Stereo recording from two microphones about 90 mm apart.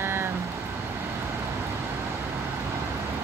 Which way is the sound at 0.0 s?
25° right (ahead or behind).